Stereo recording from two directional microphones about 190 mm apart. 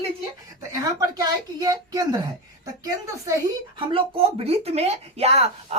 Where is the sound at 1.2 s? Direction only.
20° right (ahead or behind).